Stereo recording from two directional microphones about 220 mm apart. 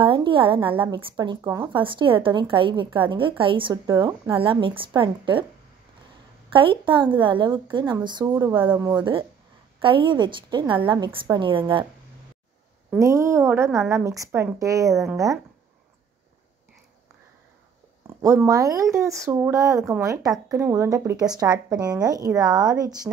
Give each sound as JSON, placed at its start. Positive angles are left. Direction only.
{"t": 0.0, "sound": "a woman's voice", "side_deg": -25}
{"t": 6.5, "sound": "a woman's voice", "side_deg": -25}
{"t": 12.9, "sound": "speech", "side_deg": -15}
{"t": 18.2, "sound": "speech", "side_deg": -15}